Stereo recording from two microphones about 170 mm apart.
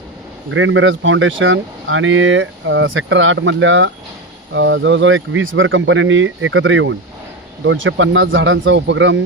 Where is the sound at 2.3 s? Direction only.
90° right.